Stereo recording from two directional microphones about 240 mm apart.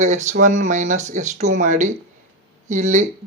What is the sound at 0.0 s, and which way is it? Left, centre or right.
Speech, right.